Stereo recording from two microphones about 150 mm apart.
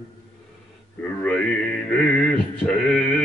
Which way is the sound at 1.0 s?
10° left (ahead or behind).